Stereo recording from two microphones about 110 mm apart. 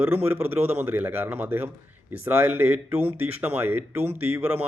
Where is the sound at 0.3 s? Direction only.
15° right (ahead or behind).